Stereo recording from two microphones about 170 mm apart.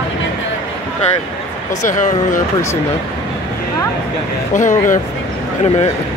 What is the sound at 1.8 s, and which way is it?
Speech, 45° left (ahead or behind).